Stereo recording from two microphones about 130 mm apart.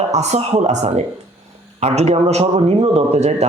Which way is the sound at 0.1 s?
60° right (ahead or behind).